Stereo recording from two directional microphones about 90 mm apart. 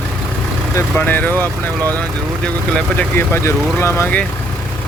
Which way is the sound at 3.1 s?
30° left (ahead or behind).